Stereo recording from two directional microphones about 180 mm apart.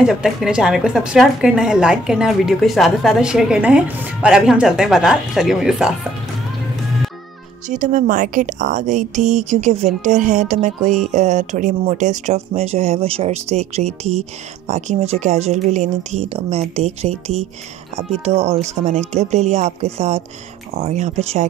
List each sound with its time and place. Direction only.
0.0 s a woman's voice: centre (ahead or behind)
7.6 s speech: 45° right (ahead or behind)